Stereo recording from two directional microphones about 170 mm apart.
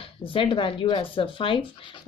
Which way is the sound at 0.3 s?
30° left (ahead or behind).